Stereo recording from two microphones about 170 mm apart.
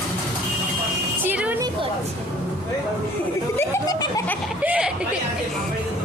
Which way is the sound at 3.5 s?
20° left (ahead or behind).